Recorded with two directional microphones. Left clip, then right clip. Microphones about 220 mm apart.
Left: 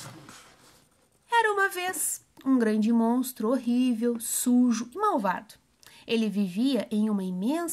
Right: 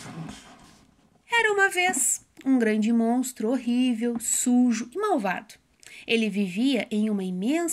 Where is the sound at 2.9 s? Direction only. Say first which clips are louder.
Right 1 dB; 30° left (ahead or behind).